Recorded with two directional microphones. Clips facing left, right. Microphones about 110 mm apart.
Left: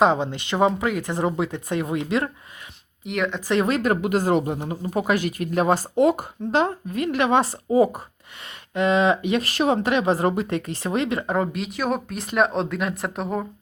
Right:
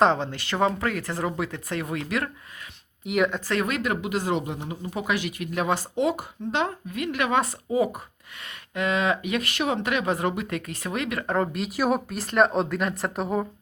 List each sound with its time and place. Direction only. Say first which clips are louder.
0.0 s speech: left 2 dB; 15° left (ahead or behind)
3.0 s speech: right 2 dB; 5° right (ahead or behind)
3.5 s speech: left 5 dB; 25° left (ahead or behind)
3.8 s speech: left 6 dB; 45° left (ahead or behind); by 11.3 s 25° left (ahead or behind)
11.3 s speech: left 1 dB; centre (ahead or behind)